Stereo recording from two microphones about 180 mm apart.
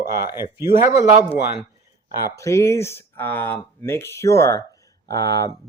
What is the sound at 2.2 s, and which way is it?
Speech, 15° left (ahead or behind).